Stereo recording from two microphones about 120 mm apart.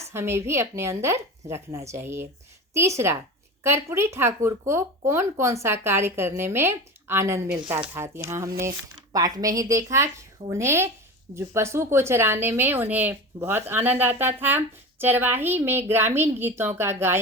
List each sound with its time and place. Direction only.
0.0 s a woman's voice: 20° right (ahead or behind)